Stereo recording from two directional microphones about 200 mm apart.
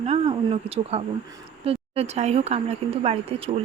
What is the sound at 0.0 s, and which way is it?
A woman's voice, 30° right (ahead or behind).